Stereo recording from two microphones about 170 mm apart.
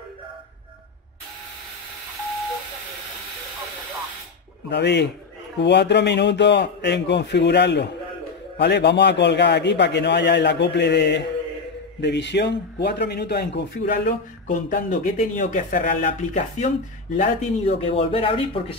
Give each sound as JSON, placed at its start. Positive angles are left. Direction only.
{"t": 4.6, "sound": "a man's voice", "side_deg": 85}
{"t": 14.0, "sound": "speech", "side_deg": 50}